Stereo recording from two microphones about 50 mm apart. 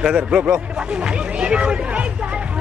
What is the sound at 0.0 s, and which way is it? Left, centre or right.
Speech, centre.